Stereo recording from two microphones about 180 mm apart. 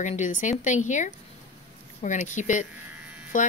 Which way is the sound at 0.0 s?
40° left (ahead or behind).